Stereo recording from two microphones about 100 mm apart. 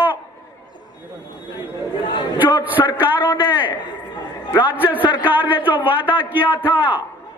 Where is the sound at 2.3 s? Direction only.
20° right (ahead or behind).